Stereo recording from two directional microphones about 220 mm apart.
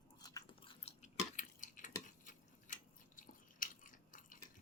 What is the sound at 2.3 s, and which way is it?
Biting, 35° left (ahead or behind).